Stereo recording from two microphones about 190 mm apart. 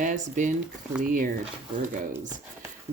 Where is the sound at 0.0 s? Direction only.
40° right (ahead or behind).